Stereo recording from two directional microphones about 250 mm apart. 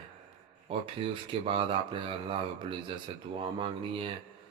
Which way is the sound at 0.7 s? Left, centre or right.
Right.